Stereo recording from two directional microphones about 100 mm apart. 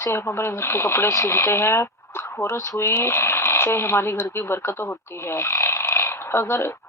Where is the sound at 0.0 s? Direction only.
25° left (ahead or behind).